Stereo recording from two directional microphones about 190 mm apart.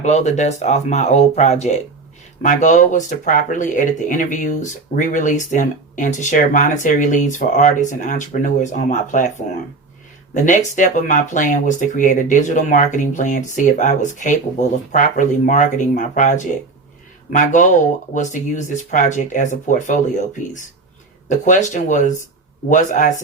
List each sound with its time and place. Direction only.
0.0 s speech: 35° left (ahead or behind)
10.3 s speech: 40° left (ahead or behind)